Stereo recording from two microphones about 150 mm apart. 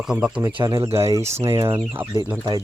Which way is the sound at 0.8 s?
40° right (ahead or behind).